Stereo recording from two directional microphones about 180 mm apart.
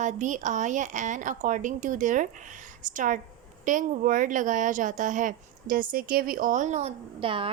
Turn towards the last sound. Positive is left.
turn(degrees=-30)  # may be behind; listen again after turning